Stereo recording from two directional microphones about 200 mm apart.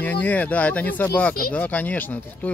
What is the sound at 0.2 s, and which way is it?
Speech, 5° left (ahead or behind).